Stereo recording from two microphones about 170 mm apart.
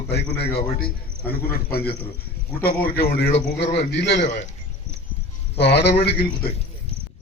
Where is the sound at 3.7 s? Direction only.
80° left.